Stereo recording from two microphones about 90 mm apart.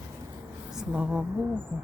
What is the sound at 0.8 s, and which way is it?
Speech, 10° right (ahead or behind).